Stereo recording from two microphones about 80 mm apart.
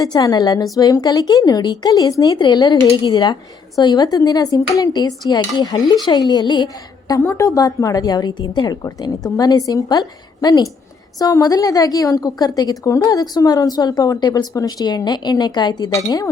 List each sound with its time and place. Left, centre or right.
0.0 s a woman's voice: left
2.4 s a woman's voice: left
7.3 s a woman's voice: left
16.0 s a woman's voice: left